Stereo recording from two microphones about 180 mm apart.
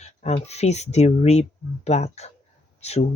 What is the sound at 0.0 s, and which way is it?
Speech, 35° left (ahead or behind).